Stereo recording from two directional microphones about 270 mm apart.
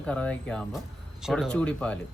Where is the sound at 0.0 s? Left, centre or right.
Centre.